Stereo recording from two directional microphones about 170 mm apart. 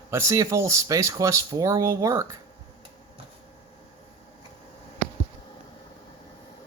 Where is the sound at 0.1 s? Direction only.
15° right (ahead or behind).